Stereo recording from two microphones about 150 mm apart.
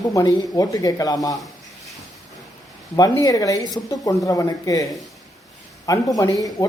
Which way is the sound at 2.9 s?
25° left (ahead or behind).